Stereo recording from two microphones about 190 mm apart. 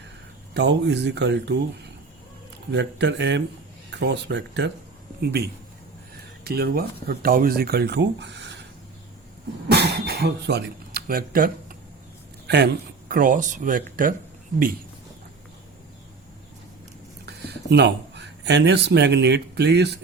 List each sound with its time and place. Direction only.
0.5 s speech: 65° right (ahead or behind)
6.4 s speech: 55° right (ahead or behind)
9.6 s speech: 60° right (ahead or behind)
12.5 s speech: 60° right (ahead or behind)
17.2 s speech: 60° right (ahead or behind)